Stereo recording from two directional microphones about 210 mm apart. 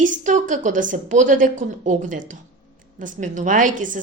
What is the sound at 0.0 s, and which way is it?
A woman's voice, 35° right (ahead or behind).